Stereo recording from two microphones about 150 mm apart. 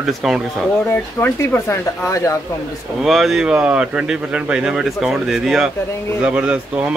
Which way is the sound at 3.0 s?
Centre (ahead or behind).